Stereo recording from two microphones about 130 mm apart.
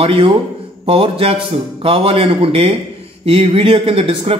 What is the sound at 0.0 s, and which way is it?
A man's voice, 45° right (ahead or behind).